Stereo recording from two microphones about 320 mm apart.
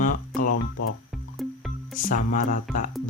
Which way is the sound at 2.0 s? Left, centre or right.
Left.